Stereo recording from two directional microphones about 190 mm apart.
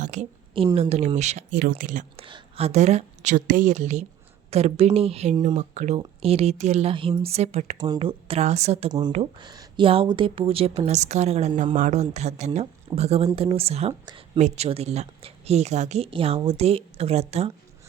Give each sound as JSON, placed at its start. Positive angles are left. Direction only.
{"t": 0.0, "sound": "a woman's voice", "side_deg": -40}
{"t": 2.1, "sound": "a woman's voice", "side_deg": -30}
{"t": 8.9, "sound": "a woman's voice", "side_deg": -20}